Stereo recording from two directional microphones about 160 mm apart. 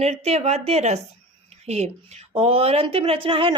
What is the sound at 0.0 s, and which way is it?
Speech, 40° right (ahead or behind).